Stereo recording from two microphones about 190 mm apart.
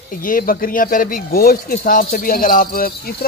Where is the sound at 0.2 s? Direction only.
45° left (ahead or behind).